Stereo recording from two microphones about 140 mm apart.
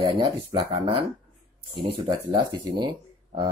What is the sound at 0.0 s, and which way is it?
Speech, 30° right (ahead or behind).